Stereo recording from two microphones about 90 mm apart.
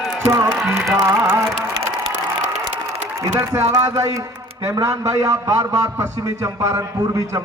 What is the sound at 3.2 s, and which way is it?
A man's voice, 40° right (ahead or behind).